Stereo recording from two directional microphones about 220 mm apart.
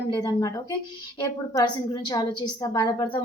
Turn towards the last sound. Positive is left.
turn(degrees=20)  # may be behind; listen again after turning